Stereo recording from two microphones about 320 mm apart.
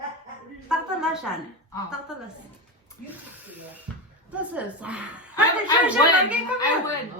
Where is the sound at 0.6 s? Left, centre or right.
Centre.